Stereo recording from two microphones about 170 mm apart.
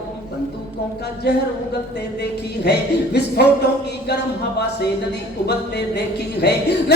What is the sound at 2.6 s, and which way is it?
Speech, 80° left.